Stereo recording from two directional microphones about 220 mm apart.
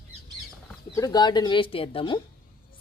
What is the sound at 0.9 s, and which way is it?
Speech, 15° left (ahead or behind).